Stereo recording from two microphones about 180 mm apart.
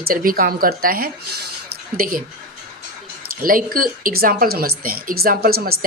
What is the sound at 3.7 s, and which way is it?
A woman's voice, 55° right (ahead or behind).